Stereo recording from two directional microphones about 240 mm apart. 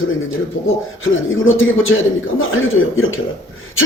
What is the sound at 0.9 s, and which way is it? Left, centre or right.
A man's voice, left.